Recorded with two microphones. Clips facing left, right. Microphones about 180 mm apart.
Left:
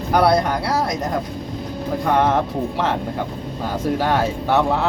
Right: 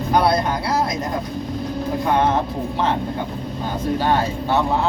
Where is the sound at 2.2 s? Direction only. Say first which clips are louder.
Left 1 dB; 75° left (ahead or behind).